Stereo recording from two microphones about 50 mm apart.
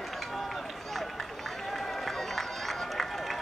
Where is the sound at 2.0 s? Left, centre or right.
Centre.